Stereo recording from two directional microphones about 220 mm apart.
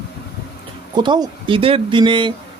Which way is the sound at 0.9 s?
20° right (ahead or behind).